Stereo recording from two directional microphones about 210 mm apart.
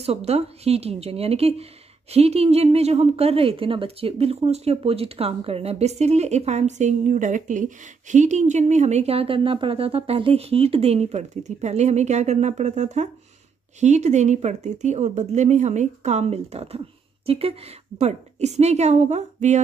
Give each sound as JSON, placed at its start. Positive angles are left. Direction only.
{"t": 0.0, "sound": "a woman's voice", "side_deg": -30}